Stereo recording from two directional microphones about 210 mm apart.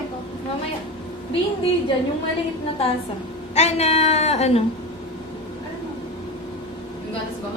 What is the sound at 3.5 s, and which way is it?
Speech, 30° left (ahead or behind).